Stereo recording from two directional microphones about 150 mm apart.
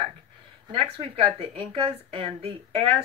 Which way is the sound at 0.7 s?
40° right (ahead or behind).